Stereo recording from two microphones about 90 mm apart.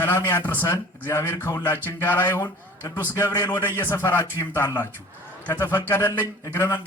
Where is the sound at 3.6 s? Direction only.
25° left (ahead or behind).